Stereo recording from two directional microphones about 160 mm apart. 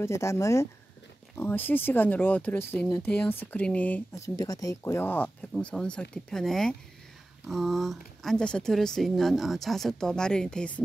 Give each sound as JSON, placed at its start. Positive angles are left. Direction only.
{"t": 0.0, "sound": "speech", "side_deg": 20}